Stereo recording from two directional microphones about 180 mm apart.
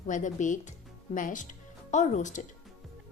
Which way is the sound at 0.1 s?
45° left (ahead or behind).